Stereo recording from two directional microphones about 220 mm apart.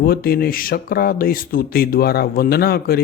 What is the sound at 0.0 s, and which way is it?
A man's voice, 45° left (ahead or behind).